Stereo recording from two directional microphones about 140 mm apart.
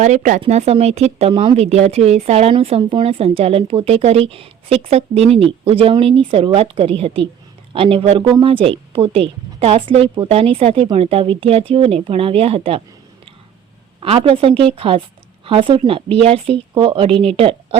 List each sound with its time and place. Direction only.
0.0 s speech: 60° right (ahead or behind)
0.4 s a woman's voice: 50° right (ahead or behind)
1.3 s a woman's voice: 40° right (ahead or behind)
14.0 s a woman's voice: 45° right (ahead or behind)